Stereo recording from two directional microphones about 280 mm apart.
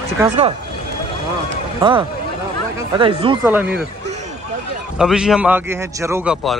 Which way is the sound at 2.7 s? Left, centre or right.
Centre.